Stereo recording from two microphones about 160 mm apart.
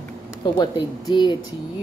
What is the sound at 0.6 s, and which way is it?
Speech, 25° left (ahead or behind).